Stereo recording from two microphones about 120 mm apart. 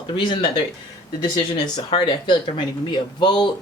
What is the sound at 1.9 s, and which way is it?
Speech, 40° left (ahead or behind).